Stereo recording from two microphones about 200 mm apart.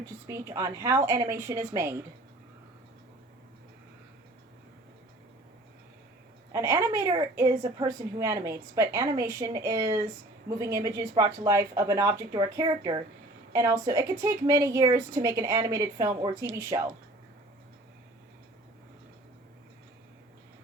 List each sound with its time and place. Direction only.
0.0 s a woman's voice: 15° right (ahead or behind)
6.5 s a woman's voice: 15° right (ahead or behind)